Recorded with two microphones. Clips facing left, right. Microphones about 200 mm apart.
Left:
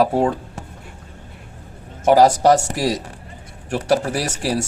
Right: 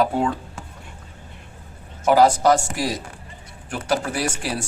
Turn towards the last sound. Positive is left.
turn(degrees=40)  # may be behind; listen again after turning